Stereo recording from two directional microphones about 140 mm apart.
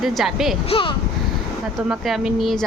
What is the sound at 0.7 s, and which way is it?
Speech, 40° left (ahead or behind).